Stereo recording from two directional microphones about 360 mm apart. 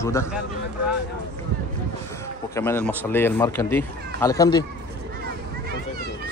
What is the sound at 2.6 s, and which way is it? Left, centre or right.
Speech, centre.